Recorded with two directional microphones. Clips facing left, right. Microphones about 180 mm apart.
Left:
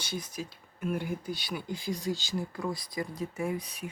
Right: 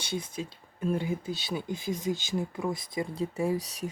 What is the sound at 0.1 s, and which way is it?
Speech, 25° right (ahead or behind).